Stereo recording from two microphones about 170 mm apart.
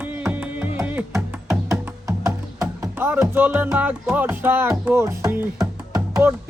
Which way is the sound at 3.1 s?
10° right (ahead or behind).